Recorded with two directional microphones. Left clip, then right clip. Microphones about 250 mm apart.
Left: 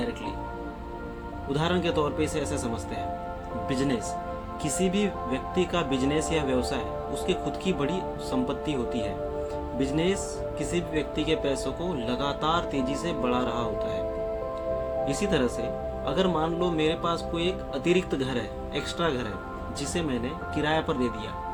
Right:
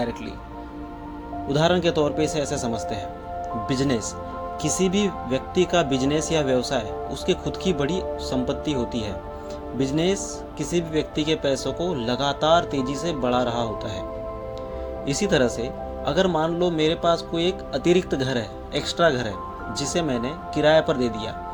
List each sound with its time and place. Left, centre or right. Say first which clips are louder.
1.5 s speech: right 7 dB; right
3.7 s speech: right 2 dB; right
15.0 s speech: right 8 dB; right